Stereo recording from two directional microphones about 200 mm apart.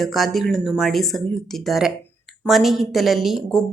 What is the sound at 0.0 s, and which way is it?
Speech, centre (ahead or behind).